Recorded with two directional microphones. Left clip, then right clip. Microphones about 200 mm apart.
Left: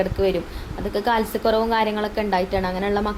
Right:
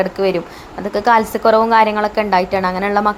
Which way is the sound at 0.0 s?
10° right (ahead or behind).